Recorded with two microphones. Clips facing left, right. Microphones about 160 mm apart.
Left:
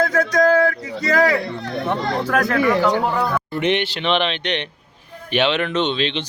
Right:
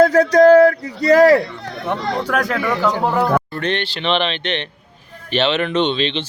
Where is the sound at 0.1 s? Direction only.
35° right (ahead or behind).